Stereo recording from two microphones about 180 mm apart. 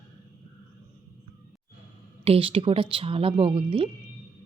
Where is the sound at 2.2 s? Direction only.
30° right (ahead or behind).